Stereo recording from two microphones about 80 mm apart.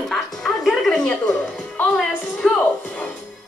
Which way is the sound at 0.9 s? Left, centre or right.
Centre.